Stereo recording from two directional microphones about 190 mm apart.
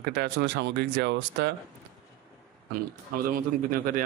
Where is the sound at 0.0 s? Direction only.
60° right (ahead or behind).